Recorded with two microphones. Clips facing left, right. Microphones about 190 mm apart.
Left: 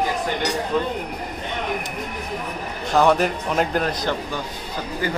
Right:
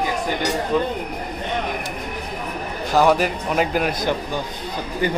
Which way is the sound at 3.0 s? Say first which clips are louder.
Even; 5° right (ahead or behind).